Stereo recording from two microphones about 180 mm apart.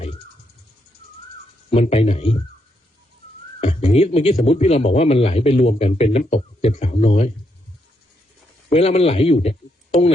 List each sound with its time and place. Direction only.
1.7 s a man's voice: 35° left (ahead or behind)
3.6 s a man's voice: 35° left (ahead or behind)
8.7 s a man's voice: 35° left (ahead or behind)